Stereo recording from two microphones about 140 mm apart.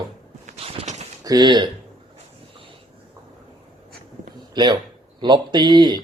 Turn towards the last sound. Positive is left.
turn(degrees=-30)  # may be behind; listen again after turning